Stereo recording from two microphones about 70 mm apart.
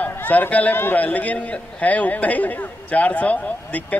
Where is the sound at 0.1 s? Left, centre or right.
Left.